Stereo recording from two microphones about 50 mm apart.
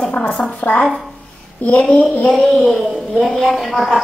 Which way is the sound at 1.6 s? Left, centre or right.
Left.